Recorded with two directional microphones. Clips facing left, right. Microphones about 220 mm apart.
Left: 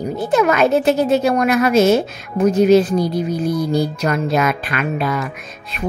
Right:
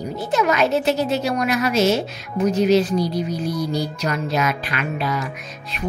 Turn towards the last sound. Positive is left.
turn(degrees=55)  # may be behind; listen again after turning